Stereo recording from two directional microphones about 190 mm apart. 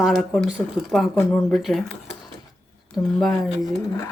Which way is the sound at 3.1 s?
Centre (ahead or behind).